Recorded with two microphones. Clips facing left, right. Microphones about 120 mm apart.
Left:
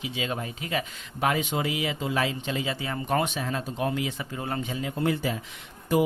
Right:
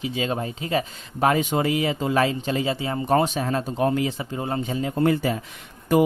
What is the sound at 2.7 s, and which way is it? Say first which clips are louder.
Speech: right 6 dB; 30° right (ahead or behind).